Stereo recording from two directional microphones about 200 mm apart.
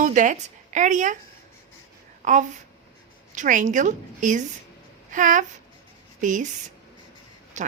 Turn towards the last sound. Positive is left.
turn(degrees=-35)  # may be behind; listen again after turning